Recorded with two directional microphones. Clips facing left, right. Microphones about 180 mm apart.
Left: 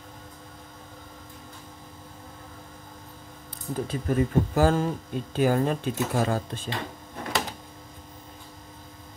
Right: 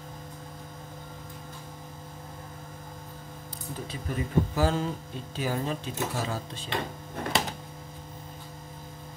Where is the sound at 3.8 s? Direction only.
50° left (ahead or behind).